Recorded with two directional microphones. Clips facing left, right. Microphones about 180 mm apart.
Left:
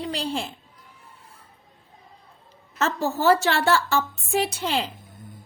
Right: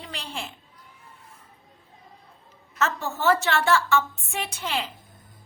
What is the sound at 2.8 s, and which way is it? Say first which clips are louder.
A woman's voice: left 3 dB; 35° left (ahead or behind).